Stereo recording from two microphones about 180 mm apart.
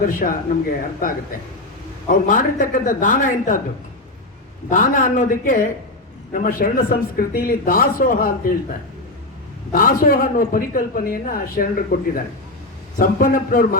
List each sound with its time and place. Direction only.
0.0 s a man's voice: 50° left (ahead or behind)
2.0 s a man's voice: 50° left (ahead or behind)
4.7 s a man's voice: 45° left (ahead or behind)
9.7 s a man's voice: 55° left (ahead or behind)